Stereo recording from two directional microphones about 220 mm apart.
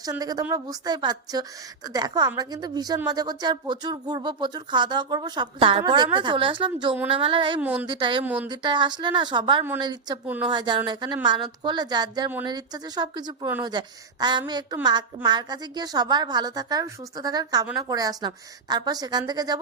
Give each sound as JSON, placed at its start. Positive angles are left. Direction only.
{"t": 0.0, "sound": "a woman's voice", "side_deg": -15}
{"t": 7.6, "sound": "a woman's voice", "side_deg": -5}
{"t": 7.9, "sound": "speech", "side_deg": -20}
{"t": 8.2, "sound": "a woman's voice", "side_deg": -5}
{"t": 8.4, "sound": "speech", "side_deg": -20}
{"t": 10.2, "sound": "a woman's voice", "side_deg": -10}
{"t": 10.5, "sound": "a woman's voice", "side_deg": -20}